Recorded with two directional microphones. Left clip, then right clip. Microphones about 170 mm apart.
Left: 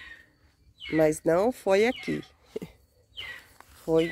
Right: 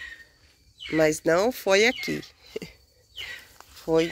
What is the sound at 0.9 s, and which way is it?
Speech, 10° left (ahead or behind).